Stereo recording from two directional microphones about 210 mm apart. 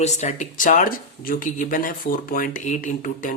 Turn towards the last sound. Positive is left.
turn(degrees=35)  # may be behind; listen again after turning